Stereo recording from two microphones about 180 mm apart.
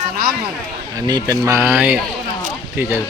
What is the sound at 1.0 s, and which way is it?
Speech, 20° right (ahead or behind).